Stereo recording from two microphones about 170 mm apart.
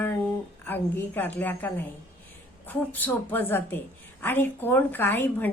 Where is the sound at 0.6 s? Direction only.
10° left (ahead or behind).